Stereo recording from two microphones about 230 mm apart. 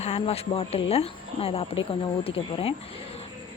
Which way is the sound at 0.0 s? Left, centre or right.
Left.